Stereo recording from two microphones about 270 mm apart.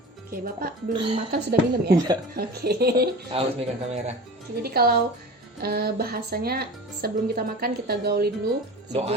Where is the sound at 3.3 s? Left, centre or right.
Centre.